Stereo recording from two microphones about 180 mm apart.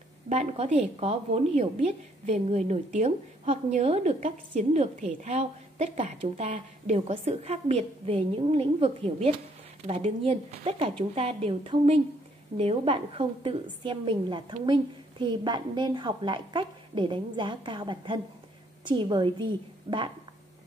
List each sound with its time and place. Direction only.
0.3 s a woman's voice: 35° right (ahead or behind)